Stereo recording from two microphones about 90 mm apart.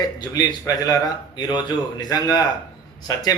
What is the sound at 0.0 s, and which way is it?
A man's voice, 45° left (ahead or behind).